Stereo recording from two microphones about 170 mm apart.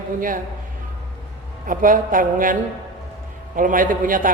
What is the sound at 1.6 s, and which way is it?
A man's voice, 55° right (ahead or behind).